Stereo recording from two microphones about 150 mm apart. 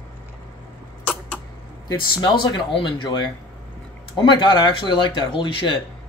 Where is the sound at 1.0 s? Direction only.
10° left (ahead or behind).